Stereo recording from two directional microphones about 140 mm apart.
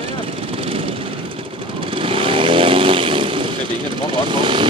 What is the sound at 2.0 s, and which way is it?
Vehicle, 40° right (ahead or behind).